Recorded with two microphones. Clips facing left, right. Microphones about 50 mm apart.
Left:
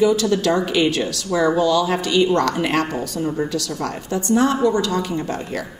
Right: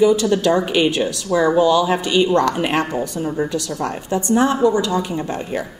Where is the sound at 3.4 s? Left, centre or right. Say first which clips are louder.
Right 2 dB; right.